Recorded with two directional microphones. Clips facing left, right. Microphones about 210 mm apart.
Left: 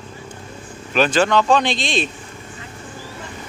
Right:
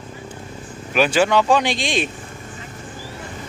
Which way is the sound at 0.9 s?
10° right (ahead or behind).